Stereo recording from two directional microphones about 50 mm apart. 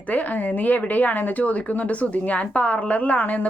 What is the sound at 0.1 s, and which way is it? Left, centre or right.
A woman's voice, left.